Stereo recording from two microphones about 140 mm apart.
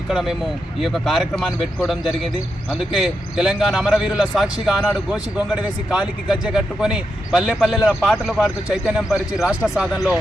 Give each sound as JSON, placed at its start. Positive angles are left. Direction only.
{"t": 0.1, "sound": "a man's voice", "side_deg": -5}
{"t": 2.6, "sound": "a man's voice", "side_deg": -5}